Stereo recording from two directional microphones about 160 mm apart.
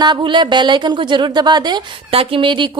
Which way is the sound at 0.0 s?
30° right (ahead or behind).